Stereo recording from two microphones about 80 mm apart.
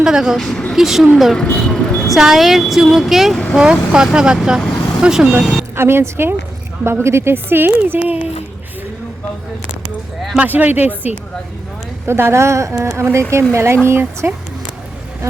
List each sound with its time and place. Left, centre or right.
0.0 s speech: centre
0.3 s speech: centre
1.6 s vehicle: centre
2.1 s speech: centre
5.7 s a woman's voice: right
10.3 s a woman's voice: centre